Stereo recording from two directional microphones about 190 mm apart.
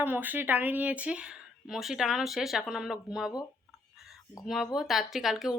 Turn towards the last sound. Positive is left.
turn(degrees=0)  # may be behind; listen again after turning